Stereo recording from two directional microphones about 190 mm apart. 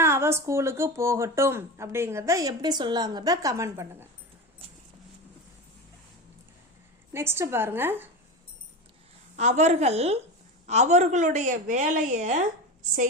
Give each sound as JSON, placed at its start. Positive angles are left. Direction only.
{"t": 0.0, "sound": "speech", "side_deg": -15}
{"t": 7.1, "sound": "speech", "side_deg": -15}
{"t": 9.3, "sound": "a woman's voice", "side_deg": -35}